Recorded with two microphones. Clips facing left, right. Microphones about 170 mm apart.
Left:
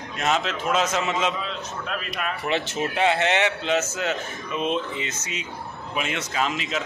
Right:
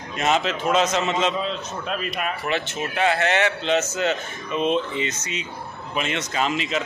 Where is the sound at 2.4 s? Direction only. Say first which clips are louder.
Left 1 dB; 25° left (ahead or behind).